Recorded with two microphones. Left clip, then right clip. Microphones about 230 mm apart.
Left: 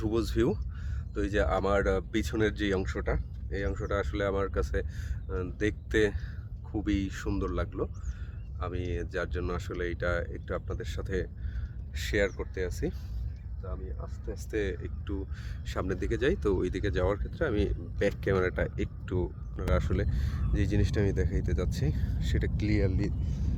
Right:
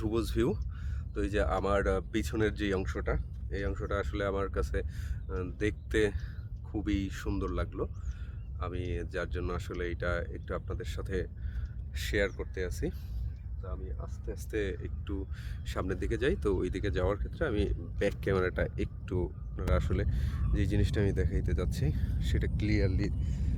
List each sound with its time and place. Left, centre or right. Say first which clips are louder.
0.0 s speech: left 2 dB; centre